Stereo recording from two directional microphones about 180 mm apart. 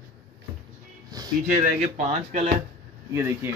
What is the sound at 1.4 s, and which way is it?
Speech, 45° right (ahead or behind).